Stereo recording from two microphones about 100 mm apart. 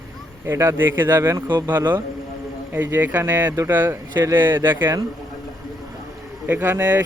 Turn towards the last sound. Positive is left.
turn(degrees=-20)  # may be behind; listen again after turning